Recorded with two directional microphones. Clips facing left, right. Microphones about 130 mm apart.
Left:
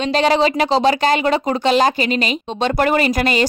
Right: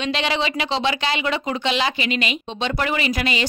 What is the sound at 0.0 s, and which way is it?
Speech, 40° left (ahead or behind).